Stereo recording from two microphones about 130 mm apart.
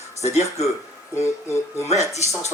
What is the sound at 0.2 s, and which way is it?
Speech, 55° left (ahead or behind).